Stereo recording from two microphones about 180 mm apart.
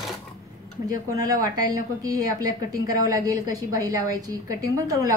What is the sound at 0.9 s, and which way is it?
Speech, 20° right (ahead or behind).